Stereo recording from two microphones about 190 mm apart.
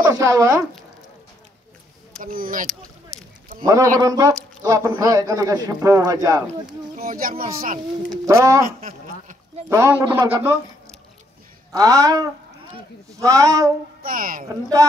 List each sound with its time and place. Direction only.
0.1 s speech: 15° right (ahead or behind)
2.2 s speech: 50° right (ahead or behind)
3.6 s speech: 15° right (ahead or behind)
7.0 s speech: 45° right (ahead or behind)
8.1 s speech: 15° right (ahead or behind)
8.6 s a sound: 45° right (ahead or behind)
9.7 s speech: 15° right (ahead or behind)
11.7 s speech: 20° right (ahead or behind)
14.0 s speech: 45° right (ahead or behind)
14.8 s speech: 15° right (ahead or behind)